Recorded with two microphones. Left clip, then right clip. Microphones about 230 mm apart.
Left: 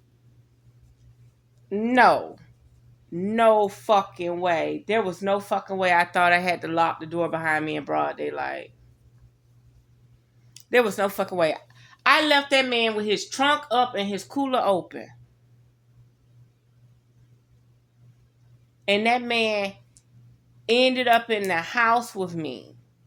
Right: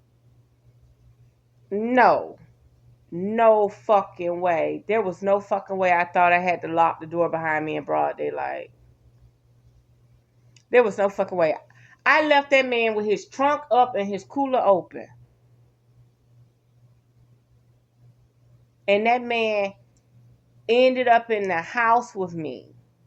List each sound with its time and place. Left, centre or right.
1.7 s speech: centre
10.5 s a woman's voice: centre
18.9 s speech: centre